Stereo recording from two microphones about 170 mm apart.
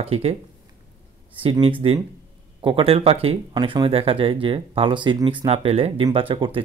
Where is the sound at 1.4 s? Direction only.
30° right (ahead or behind).